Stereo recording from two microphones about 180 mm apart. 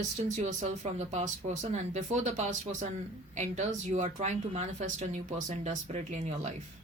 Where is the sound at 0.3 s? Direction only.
40° right (ahead or behind).